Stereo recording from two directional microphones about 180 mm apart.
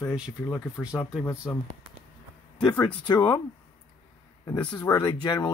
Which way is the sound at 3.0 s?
25° left (ahead or behind).